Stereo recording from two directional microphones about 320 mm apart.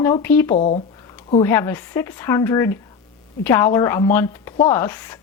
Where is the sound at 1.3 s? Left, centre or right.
Centre.